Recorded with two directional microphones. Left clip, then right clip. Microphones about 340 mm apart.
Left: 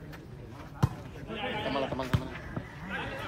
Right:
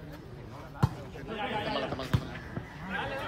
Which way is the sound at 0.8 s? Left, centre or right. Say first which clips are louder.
Right 1 dB; centre.